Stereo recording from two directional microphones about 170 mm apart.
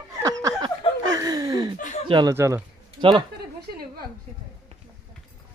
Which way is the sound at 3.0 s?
30° right (ahead or behind).